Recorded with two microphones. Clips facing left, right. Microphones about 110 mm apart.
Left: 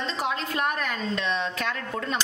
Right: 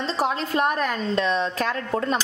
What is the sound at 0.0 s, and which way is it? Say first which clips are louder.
A woman's voice: right 4 dB; 35° right (ahead or behind).